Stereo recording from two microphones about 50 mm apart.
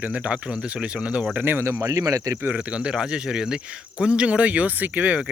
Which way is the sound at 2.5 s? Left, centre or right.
Centre.